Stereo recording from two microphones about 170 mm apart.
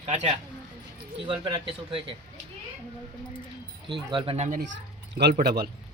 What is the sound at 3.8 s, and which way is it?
Speech, 30° right (ahead or behind).